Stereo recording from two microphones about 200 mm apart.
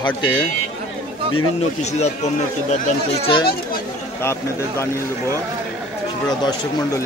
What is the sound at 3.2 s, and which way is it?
Speech, 25° left (ahead or behind).